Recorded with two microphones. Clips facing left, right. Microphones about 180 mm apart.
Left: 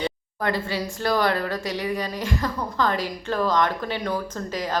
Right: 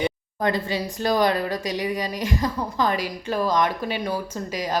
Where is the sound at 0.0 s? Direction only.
20° right (ahead or behind).